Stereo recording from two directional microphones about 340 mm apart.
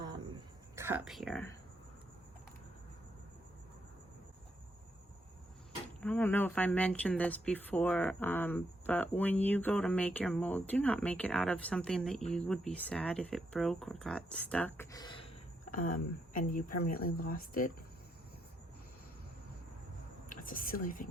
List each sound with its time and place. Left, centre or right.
0.8 s speech: centre
6.0 s speech: centre; by 17.7 s left
20.3 s speech: left